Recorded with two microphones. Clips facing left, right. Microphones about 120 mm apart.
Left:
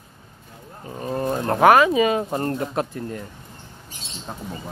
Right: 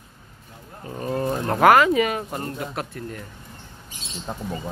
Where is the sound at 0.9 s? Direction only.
15° left (ahead or behind).